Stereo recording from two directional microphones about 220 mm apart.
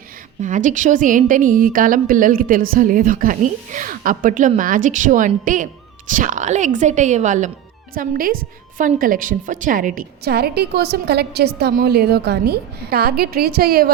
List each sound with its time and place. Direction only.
0.4 s a woman's voice: 35° right (ahead or behind)